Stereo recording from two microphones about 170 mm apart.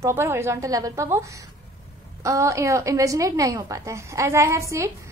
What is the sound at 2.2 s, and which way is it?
A woman's voice, 15° right (ahead or behind).